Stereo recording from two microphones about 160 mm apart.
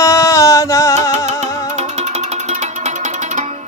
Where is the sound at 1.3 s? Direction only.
45° right (ahead or behind).